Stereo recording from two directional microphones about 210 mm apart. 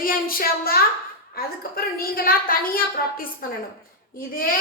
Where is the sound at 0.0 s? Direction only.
45° left (ahead or behind).